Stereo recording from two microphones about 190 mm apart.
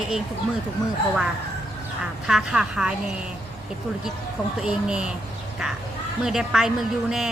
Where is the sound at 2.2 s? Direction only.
5° right (ahead or behind).